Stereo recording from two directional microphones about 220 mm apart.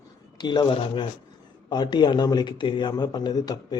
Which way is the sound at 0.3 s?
20° left (ahead or behind).